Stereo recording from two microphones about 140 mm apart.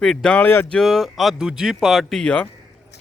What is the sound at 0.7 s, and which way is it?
Speech, centre (ahead or behind).